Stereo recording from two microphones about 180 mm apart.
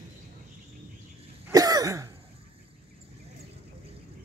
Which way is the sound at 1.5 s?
20° right (ahead or behind).